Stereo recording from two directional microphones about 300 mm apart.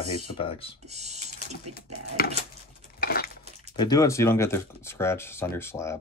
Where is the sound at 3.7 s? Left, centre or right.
Centre.